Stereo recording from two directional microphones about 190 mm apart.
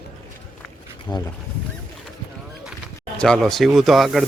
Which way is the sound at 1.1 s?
20° left (ahead or behind).